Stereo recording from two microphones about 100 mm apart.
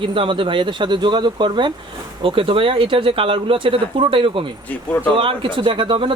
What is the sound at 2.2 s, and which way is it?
Speech, 65° right (ahead or behind).